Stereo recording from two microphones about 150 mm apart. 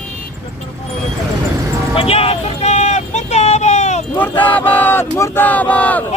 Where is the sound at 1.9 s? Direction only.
40° left (ahead or behind).